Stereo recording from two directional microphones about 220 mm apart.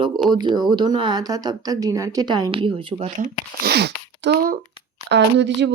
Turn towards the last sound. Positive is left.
turn(degrees=-55)  # may be behind; listen again after turning